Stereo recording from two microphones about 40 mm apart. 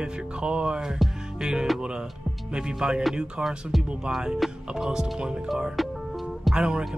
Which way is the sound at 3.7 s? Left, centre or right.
Centre.